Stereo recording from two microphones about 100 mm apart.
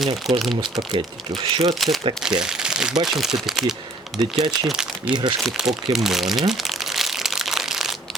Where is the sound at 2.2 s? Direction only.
5° right (ahead or behind).